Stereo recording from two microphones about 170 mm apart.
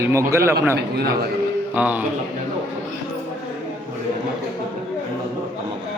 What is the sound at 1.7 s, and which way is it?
Speech, 10° right (ahead or behind).